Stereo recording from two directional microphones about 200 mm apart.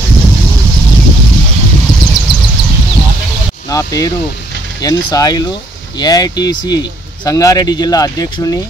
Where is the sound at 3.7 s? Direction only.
15° left (ahead or behind).